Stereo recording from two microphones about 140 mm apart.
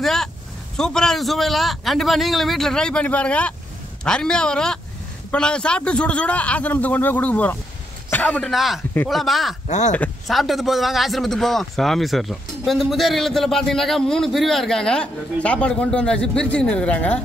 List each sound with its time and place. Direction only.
0.0 s a man's voice: 5° left (ahead or behind)
8.5 s a man's voice: centre (ahead or behind)
9.7 s speech: 60° left (ahead or behind)
10.2 s a man's voice: centre (ahead or behind)